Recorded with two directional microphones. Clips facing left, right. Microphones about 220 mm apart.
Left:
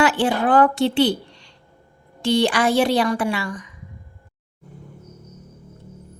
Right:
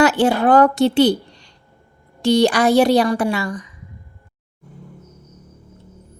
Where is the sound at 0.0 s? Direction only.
40° right (ahead or behind).